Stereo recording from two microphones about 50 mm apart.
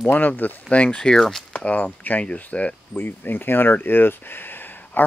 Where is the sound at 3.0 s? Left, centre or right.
Left.